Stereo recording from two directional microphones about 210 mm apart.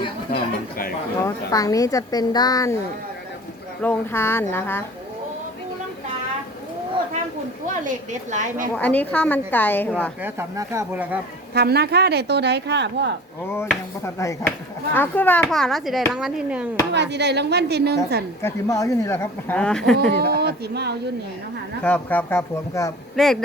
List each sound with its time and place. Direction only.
0.3 s speech: 45° left (ahead or behind)
1.2 s speech: 15° left (ahead or behind)
3.8 s speech: 10° left (ahead or behind)
7.9 s a woman's voice: 35° right (ahead or behind)
8.7 s speech: 5° left (ahead or behind)
10.2 s speech: 10° right (ahead or behind)
11.5 s speech: 50° right (ahead or behind)
14.0 s a child's voice: 15° left (ahead or behind); by 16.6 s 5° right (ahead or behind)
16.9 s speech: 55° right (ahead or behind)
18.4 s speech: 15° left (ahead or behind)
20.0 s speech: 50° right (ahead or behind)
21.8 s speech: 5° left (ahead or behind)
23.1 s a child's voice: centre (ahead or behind)